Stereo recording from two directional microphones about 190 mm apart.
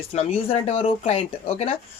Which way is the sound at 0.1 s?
35° left (ahead or behind).